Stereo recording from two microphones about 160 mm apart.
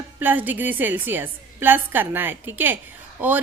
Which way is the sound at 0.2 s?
10° right (ahead or behind).